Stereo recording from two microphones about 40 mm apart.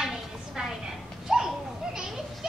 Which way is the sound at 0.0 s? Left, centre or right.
Centre.